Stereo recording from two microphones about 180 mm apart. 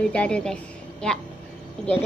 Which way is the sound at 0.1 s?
5° left (ahead or behind).